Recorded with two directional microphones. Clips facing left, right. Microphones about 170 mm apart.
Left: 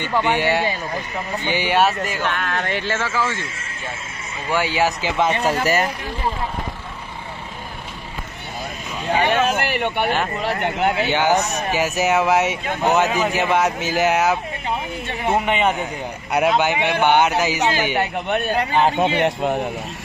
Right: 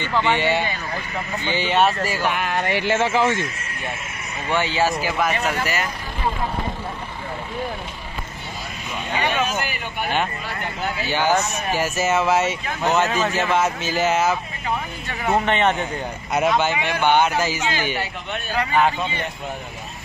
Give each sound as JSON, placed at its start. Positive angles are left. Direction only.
{"t": 0.0, "sound": "speech", "side_deg": 15}
{"t": 2.0, "sound": "speech", "side_deg": -5}
{"t": 4.5, "sound": "speech", "side_deg": 10}
{"t": 5.6, "sound": "speech", "side_deg": 45}
{"t": 9.5, "sound": "speech", "side_deg": 65}
{"t": 11.1, "sound": "speech", "side_deg": 20}
{"t": 17.9, "sound": "a man's voice", "side_deg": 60}
{"t": 18.7, "sound": "speech", "side_deg": 30}
{"t": 18.9, "sound": "speech", "side_deg": 75}